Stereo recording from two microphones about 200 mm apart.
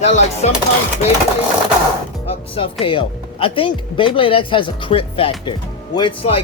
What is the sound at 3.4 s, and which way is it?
Speech, 25° left (ahead or behind).